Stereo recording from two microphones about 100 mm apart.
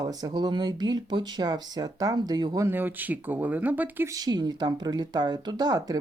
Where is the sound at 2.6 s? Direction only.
20° right (ahead or behind).